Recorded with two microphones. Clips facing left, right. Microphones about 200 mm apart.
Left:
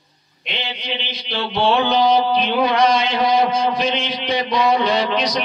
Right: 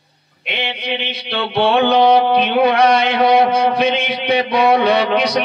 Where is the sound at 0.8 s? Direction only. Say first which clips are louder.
Right 5 dB; 65° right (ahead or behind).